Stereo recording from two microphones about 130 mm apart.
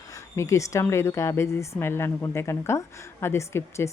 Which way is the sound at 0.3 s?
25° left (ahead or behind).